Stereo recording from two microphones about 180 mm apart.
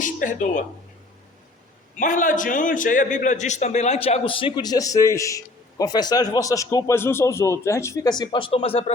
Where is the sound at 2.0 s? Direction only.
45° left (ahead or behind).